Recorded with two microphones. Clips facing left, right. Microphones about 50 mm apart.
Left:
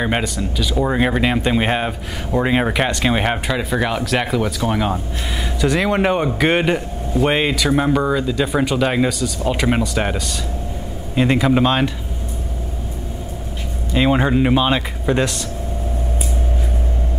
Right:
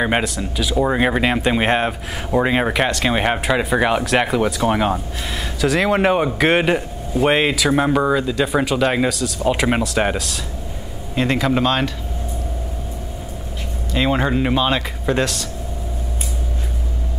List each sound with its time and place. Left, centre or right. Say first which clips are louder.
0.2 s speech: even; centre
3.5 s speech: right 3 dB; centre
4.0 s speech: right 2 dB; centre
5.6 s speech: right 1 dB; centre
11.1 s a man's voice: left 3 dB; centre
13.9 s speech: left 2 dB; centre